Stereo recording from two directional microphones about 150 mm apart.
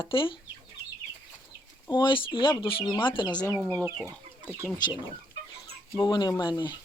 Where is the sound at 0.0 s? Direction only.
35° left (ahead or behind).